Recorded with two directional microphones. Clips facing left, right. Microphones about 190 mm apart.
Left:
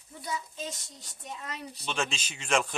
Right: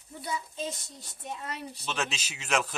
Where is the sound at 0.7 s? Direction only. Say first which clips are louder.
Right 2 dB; 60° right (ahead or behind).